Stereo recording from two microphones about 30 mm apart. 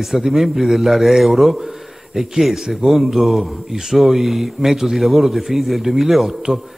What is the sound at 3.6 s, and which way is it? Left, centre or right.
Speech, centre.